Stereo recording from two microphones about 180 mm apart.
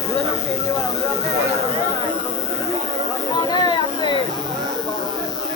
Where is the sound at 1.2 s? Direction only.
15° right (ahead or behind).